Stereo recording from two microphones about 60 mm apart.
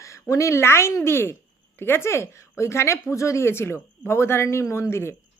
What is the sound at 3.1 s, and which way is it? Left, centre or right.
A woman's voice, left.